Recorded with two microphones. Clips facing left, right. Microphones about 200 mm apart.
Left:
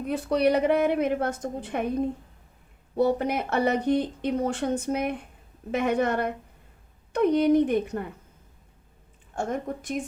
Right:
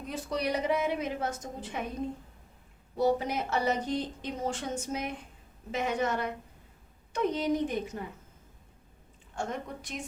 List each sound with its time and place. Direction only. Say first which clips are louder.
0.0 s a woman's voice: left 9 dB; 60° left (ahead or behind)
2.9 s a woman's voice: left 4 dB; 60° left (ahead or behind)
9.3 s a woman's voice: left 6 dB; 50° left (ahead or behind)